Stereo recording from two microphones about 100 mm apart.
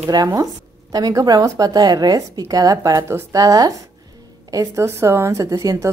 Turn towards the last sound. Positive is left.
turn(degrees=-35)  # may be behind; listen again after turning